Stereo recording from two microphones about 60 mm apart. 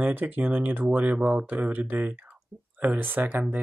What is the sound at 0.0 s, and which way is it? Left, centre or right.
Speech, right.